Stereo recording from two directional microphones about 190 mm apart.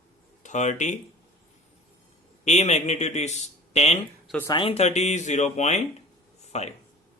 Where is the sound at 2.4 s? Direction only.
35° left (ahead or behind).